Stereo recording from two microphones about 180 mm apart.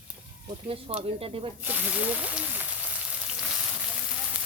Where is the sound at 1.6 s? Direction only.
10° right (ahead or behind).